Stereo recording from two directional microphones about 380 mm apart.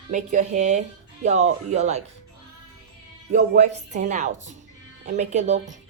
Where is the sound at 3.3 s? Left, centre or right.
Centre.